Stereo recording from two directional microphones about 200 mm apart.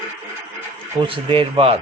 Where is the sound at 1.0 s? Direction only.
25° right (ahead or behind).